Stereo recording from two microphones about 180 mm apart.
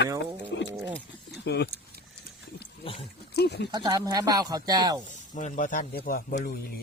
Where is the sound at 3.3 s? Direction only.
65° left (ahead or behind).